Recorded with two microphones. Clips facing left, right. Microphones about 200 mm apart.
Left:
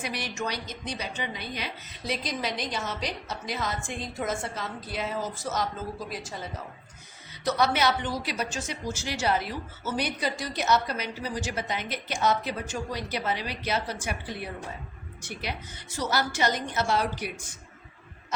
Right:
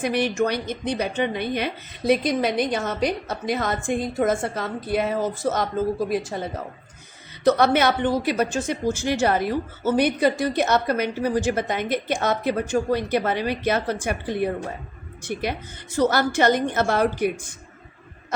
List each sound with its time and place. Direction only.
0.0 s a woman's voice: 55° right (ahead or behind)